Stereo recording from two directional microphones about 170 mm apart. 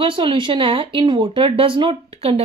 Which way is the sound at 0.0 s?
30° right (ahead or behind).